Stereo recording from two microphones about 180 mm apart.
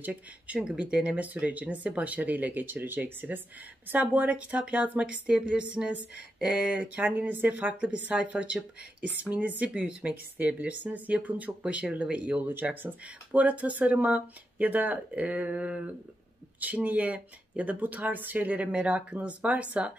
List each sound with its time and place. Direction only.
0.0 s speech: 5° right (ahead or behind)